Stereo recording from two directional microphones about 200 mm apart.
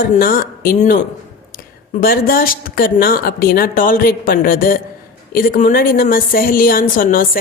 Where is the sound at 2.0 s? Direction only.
50° left (ahead or behind).